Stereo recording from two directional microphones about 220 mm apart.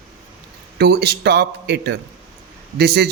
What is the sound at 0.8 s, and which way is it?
A man's voice, 50° right (ahead or behind).